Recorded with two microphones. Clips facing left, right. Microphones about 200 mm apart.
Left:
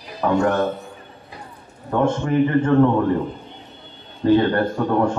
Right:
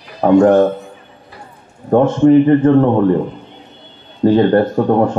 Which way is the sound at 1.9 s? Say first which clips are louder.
Right 10 dB; 50° right (ahead or behind).